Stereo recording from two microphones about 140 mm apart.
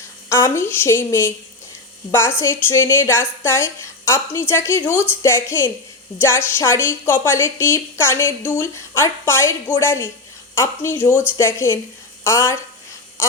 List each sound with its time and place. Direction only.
0.3 s a woman's voice: 15° left (ahead or behind)
2.4 s a woman's voice: 15° left (ahead or behind)